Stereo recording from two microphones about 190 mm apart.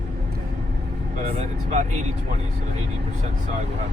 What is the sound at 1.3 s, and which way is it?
Speech, 40° right (ahead or behind).